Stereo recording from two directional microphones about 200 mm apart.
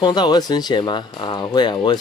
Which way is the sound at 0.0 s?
20° left (ahead or behind).